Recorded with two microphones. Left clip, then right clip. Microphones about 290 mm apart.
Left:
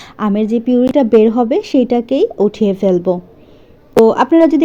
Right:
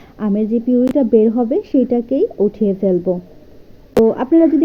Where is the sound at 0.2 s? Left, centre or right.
Left.